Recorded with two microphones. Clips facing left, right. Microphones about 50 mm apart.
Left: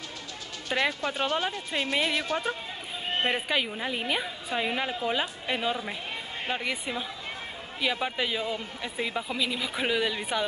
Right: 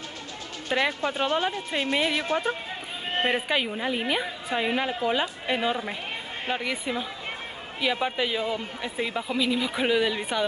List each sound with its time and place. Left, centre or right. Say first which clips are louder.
0.7 s speech: right 2 dB; centre
3.3 s speech: right 3 dB; centre